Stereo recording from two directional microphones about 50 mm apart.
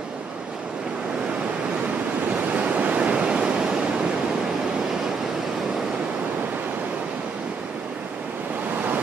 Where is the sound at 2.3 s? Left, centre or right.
Right.